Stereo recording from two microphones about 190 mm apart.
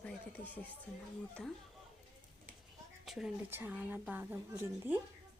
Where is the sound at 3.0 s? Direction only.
Centre (ahead or behind).